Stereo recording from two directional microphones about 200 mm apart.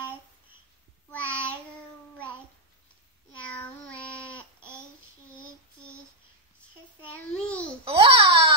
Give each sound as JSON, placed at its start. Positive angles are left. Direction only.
{"t": 1.1, "sound": "child singing", "side_deg": 5}
{"t": 3.3, "sound": "child singing", "side_deg": 5}
{"t": 7.2, "sound": "babbling", "side_deg": 5}
{"t": 7.8, "sound": "babbling", "side_deg": -30}